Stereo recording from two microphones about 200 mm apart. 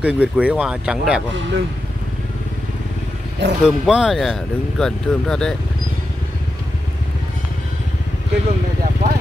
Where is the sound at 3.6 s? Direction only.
5° right (ahead or behind).